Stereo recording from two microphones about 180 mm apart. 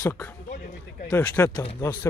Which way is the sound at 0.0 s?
15° left (ahead or behind).